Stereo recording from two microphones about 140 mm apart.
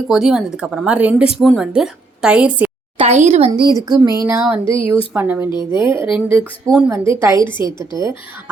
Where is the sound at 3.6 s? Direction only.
30° right (ahead or behind).